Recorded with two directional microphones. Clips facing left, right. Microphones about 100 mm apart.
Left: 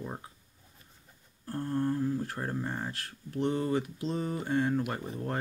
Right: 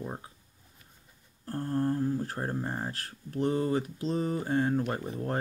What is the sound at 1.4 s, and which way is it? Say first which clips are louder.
Speech: right 1 dB; 30° right (ahead or behind).